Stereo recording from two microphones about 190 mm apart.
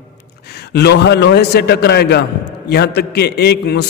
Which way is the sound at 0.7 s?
65° left (ahead or behind).